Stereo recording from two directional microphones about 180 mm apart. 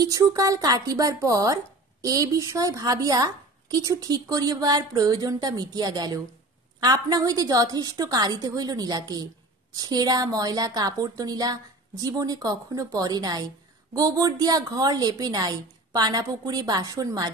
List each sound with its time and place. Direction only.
0.0 s speech: 20° right (ahead or behind)